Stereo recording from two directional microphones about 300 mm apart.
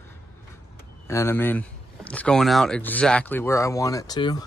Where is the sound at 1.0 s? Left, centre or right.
Centre.